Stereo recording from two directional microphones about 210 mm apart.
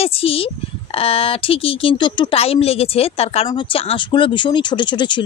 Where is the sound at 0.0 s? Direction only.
25° left (ahead or behind).